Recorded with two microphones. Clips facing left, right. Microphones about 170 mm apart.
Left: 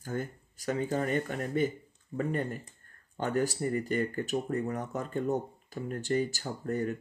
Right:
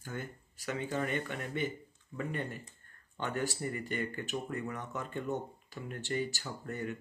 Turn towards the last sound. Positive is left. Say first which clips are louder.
# left 7 dB
turn(degrees=40)  # may be behind; listen again after turning